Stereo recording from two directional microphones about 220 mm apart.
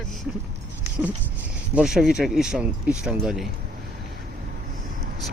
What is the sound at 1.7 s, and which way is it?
Speech, centre (ahead or behind).